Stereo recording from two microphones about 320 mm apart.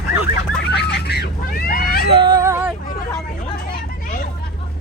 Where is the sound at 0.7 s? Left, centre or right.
Left.